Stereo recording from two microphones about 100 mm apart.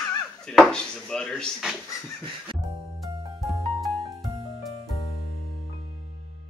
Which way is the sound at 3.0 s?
Centre (ahead or behind).